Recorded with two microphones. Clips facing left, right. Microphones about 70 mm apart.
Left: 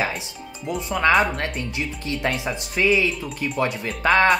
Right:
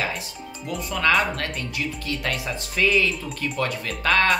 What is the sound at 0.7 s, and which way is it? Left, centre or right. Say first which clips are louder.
Speech: left 3 dB; left.